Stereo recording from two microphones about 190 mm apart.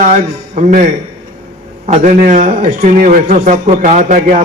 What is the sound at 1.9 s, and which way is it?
A man's voice, 45° right (ahead or behind).